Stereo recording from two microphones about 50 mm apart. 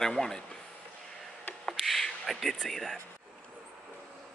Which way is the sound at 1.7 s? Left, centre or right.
Centre.